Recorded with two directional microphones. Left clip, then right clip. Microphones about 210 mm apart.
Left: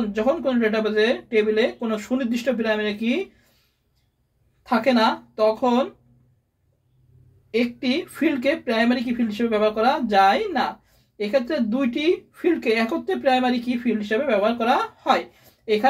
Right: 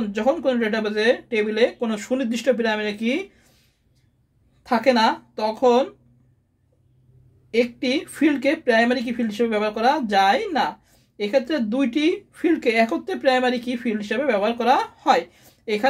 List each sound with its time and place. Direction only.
0.1 s a woman's voice: 50° right (ahead or behind)
4.6 s a woman's voice: 50° right (ahead or behind)
7.5 s a woman's voice: 50° right (ahead or behind)